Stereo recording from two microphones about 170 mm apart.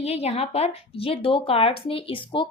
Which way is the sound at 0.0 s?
35° left (ahead or behind).